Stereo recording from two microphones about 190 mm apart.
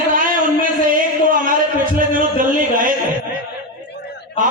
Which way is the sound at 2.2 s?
45° right (ahead or behind).